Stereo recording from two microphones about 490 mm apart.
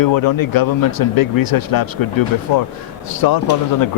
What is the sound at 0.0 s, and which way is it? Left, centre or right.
Speech, left.